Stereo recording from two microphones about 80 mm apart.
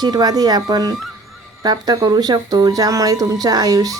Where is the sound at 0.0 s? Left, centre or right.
Right.